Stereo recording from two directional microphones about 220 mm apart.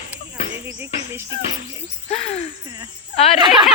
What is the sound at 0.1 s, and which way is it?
Music, 10° right (ahead or behind).